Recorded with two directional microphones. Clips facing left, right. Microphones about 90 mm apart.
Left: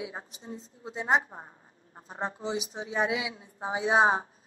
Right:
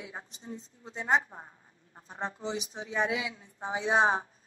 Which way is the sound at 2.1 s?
30° left (ahead or behind).